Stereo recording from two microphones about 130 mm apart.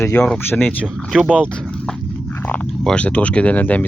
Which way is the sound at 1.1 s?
5° right (ahead or behind).